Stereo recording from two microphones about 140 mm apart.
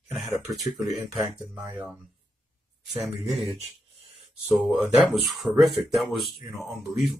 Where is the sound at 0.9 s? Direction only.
10° right (ahead or behind).